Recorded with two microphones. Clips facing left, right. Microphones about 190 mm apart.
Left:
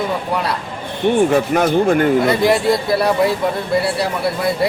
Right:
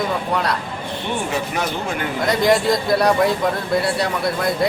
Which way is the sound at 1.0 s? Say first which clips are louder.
Left 11 dB; 50° left (ahead or behind).